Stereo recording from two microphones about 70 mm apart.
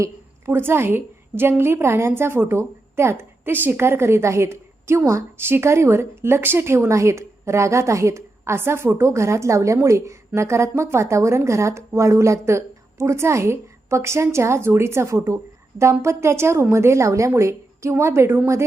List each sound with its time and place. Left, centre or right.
0.0 s a woman's voice: right